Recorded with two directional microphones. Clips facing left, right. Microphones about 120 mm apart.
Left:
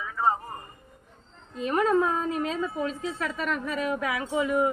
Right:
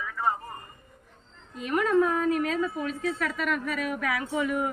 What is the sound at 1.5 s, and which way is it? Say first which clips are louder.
A woman's voice: even; 30° left (ahead or behind).